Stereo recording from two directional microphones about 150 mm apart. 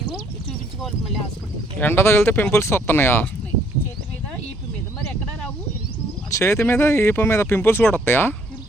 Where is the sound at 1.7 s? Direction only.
15° left (ahead or behind).